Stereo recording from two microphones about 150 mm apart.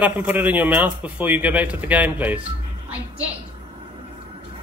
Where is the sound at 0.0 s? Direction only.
10° right (ahead or behind).